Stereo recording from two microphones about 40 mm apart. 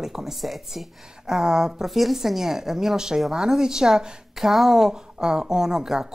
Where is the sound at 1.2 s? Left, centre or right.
Centre.